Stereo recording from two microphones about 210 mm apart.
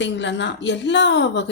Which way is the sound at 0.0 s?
60° left (ahead or behind).